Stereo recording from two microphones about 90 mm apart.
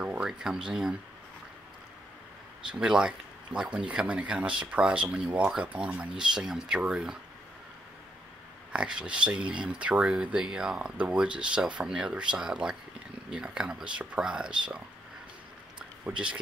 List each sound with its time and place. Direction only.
0.0 s speech: 10° right (ahead or behind)
2.7 s speech: 5° right (ahead or behind)
8.7 s speech: 10° right (ahead or behind)